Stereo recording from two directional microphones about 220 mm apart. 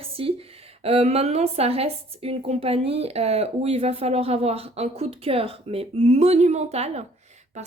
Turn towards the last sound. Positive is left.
turn(degrees=-30)  # may be behind; listen again after turning